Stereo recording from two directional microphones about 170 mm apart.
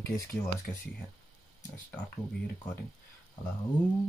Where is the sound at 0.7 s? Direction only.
10° left (ahead or behind).